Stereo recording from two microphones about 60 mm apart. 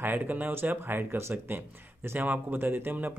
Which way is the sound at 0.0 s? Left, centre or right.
Right.